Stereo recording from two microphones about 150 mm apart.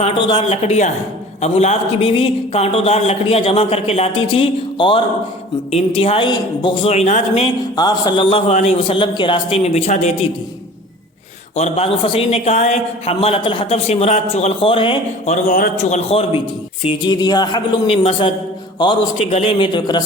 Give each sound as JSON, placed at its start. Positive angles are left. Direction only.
{"t": 0.0, "sound": "a man's voice", "side_deg": 45}
{"t": 7.8, "sound": "a man's voice", "side_deg": 30}
{"t": 11.5, "sound": "a man's voice", "side_deg": 45}
{"t": 15.3, "sound": "a man's voice", "side_deg": 60}
{"t": 16.8, "sound": "speech", "side_deg": 30}
{"t": 17.9, "sound": "a man's voice", "side_deg": 45}
{"t": 19.3, "sound": "a man's voice", "side_deg": 45}